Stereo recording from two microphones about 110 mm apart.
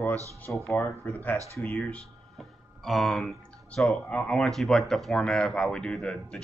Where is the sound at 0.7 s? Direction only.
20° left (ahead or behind).